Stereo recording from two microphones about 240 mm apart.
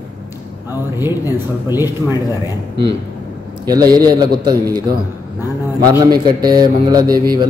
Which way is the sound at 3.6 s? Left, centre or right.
Centre.